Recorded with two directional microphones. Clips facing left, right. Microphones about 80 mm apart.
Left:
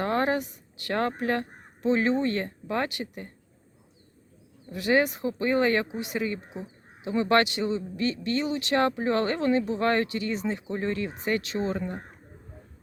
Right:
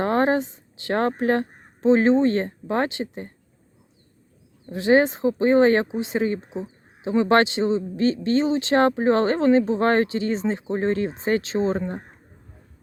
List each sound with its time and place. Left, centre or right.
0.0 s speech: right
4.7 s speech: right